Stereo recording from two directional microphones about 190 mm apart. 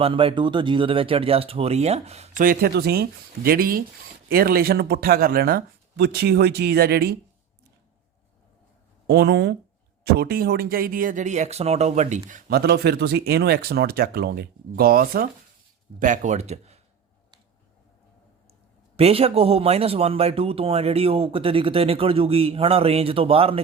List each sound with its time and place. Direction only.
0.0 s speech: 30° right (ahead or behind); by 7.2 s 55° right (ahead or behind)
9.0 s speech: 60° right (ahead or behind); by 12.4 s 40° right (ahead or behind)
12.5 s speech: 55° right (ahead or behind); by 16.8 s 35° right (ahead or behind)
18.9 s speech: 30° right (ahead or behind)